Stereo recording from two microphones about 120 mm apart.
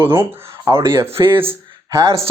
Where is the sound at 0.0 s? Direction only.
20° right (ahead or behind).